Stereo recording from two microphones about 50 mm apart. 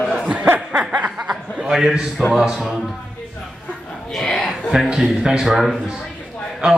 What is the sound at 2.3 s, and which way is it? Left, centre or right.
Speech, centre.